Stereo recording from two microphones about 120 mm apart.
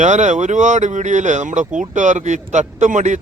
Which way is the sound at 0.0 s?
85° right.